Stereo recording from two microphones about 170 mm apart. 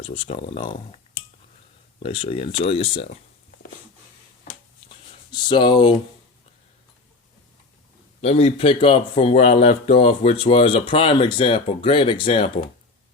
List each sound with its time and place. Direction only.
0.0 s speech: 35° left (ahead or behind)
5.3 s speech: 25° left (ahead or behind)
8.2 s speech: 40° left (ahead or behind)